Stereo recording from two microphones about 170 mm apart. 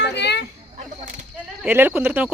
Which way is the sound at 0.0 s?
85° left.